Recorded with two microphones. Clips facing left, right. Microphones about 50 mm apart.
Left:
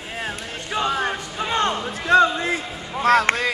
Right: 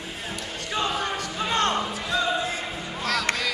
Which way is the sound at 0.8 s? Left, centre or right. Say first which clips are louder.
Left 6 dB; left.